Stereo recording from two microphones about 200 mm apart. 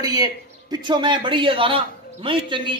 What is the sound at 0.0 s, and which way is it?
A man's voice, 20° right (ahead or behind).